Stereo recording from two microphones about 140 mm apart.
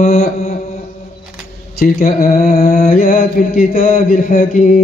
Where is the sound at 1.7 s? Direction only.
75° left (ahead or behind); by 2.6 s 55° left (ahead or behind).